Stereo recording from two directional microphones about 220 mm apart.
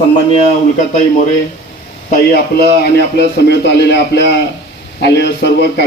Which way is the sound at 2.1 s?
45° left (ahead or behind).